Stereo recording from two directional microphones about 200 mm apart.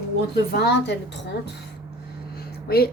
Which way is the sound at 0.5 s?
55° left (ahead or behind).